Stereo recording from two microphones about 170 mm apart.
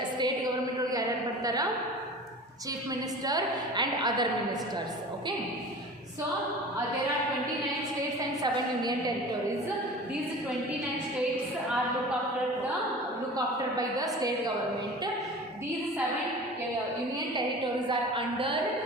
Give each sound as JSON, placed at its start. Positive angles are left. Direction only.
{"t": 3.2, "sound": "a woman's voice", "side_deg": -25}
{"t": 8.4, "sound": "a woman's voice", "side_deg": -25}
{"t": 13.3, "sound": "a woman's voice", "side_deg": -20}
{"t": 17.8, "sound": "a woman's voice", "side_deg": -30}